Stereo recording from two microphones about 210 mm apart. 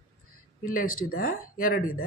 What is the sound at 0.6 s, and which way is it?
Speech, 40° left (ahead or behind).